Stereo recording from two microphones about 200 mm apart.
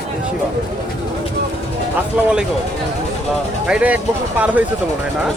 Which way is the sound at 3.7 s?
5° right (ahead or behind).